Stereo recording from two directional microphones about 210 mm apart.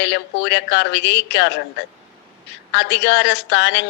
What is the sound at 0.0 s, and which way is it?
A woman's voice, 55° left (ahead or behind).